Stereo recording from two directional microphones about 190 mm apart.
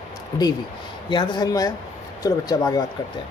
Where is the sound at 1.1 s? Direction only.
25° left (ahead or behind).